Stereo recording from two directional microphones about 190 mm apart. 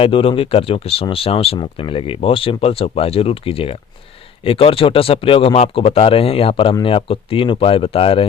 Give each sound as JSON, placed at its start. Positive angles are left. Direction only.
{"t": 0.0, "sound": "speech", "side_deg": 30}